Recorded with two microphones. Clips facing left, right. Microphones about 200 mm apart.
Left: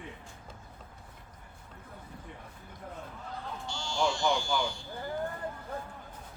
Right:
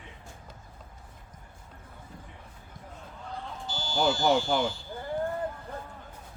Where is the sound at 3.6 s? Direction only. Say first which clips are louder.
Right 4 dB; 5° right (ahead or behind).